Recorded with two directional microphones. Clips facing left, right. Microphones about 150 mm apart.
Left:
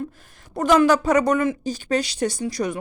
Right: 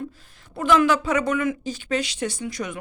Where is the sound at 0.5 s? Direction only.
40° left (ahead or behind).